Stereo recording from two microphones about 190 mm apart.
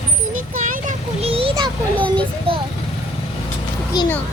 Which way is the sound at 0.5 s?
45° right (ahead or behind).